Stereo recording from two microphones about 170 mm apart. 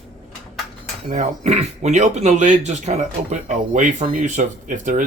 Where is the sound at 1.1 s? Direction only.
40° right (ahead or behind).